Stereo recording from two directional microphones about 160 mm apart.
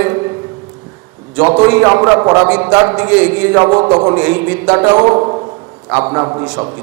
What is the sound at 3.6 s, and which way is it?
Speech, 30° right (ahead or behind).